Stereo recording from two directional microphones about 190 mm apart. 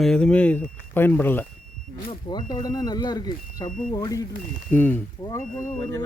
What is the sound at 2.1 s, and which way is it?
Speech, 25° left (ahead or behind).